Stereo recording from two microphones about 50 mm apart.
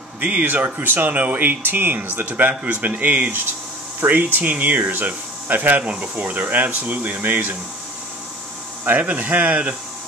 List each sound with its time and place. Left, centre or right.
0.2 s speech: right
8.8 s speech: right